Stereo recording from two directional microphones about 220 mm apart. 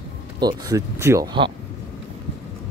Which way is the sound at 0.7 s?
15° right (ahead or behind).